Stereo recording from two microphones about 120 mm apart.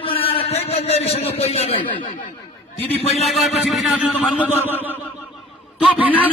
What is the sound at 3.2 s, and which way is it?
Speech, centre (ahead or behind).